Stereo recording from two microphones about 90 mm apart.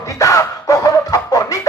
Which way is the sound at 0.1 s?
40° left (ahead or behind).